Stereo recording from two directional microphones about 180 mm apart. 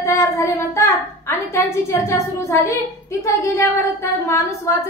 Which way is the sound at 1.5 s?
15° left (ahead or behind).